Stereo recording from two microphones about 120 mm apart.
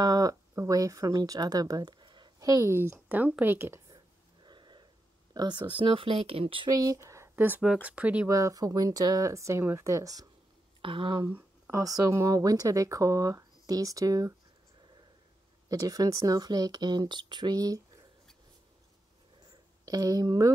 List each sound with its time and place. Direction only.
0.0 s speech: 30° right (ahead or behind)
3.9 s a sound: 40° right (ahead or behind)
5.3 s speech: 35° right (ahead or behind)
6.7 s speech: 30° right (ahead or behind); by 8.3 s 10° right (ahead or behind)
8.3 s speech: 30° right (ahead or behind)
10.8 s speech: 45° right (ahead or behind)
11.7 s speech: 30° right (ahead or behind)
15.7 s speech: 30° right (ahead or behind)
19.8 s speech: 30° right (ahead or behind)